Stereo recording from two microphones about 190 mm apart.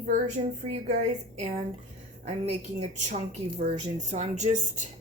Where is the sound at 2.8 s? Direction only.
40° right (ahead or behind).